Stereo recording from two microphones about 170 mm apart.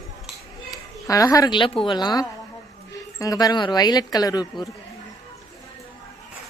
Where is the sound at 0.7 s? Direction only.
20° left (ahead or behind).